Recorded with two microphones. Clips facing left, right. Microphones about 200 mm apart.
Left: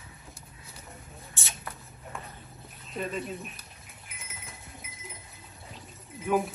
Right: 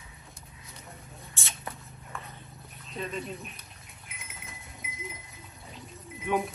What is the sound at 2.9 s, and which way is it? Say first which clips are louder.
Speech: left 2 dB; centre (ahead or behind).